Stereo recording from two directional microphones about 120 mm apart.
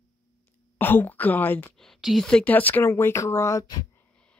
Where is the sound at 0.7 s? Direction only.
15° left (ahead or behind).